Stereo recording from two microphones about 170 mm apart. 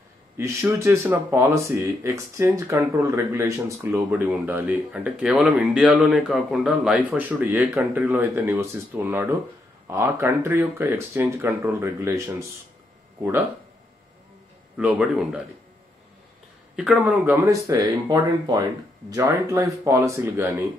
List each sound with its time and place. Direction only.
0.4 s speech: 15° right (ahead or behind)
14.8 s speech: 5° right (ahead or behind)
16.7 s speech: 5° right (ahead or behind)